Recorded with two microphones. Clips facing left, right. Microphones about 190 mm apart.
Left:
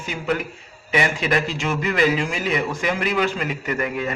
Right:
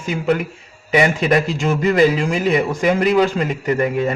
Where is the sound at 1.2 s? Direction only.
40° right (ahead or behind).